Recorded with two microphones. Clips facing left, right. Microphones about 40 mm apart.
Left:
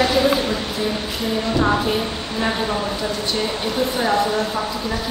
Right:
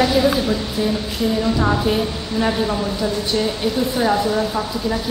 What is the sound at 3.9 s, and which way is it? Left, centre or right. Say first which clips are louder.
Speech: even; centre.